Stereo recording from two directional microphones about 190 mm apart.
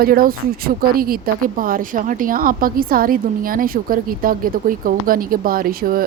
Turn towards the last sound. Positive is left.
turn(degrees=-50)  # may be behind; listen again after turning